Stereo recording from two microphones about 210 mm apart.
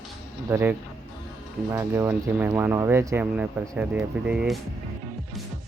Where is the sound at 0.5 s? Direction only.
10° right (ahead or behind).